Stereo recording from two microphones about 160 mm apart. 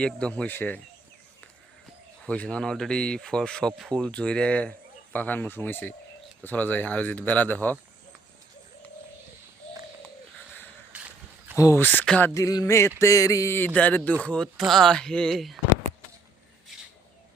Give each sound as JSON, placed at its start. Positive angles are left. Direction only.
{"t": 0.0, "sound": "speech", "side_deg": 5}
{"t": 2.2, "sound": "speech", "side_deg": 5}
{"t": 10.9, "sound": "wild animals", "side_deg": -10}
{"t": 11.5, "sound": "speech", "side_deg": 20}
{"t": 12.3, "sound": "a sound", "side_deg": 20}
{"t": 13.7, "sound": "speech", "side_deg": 10}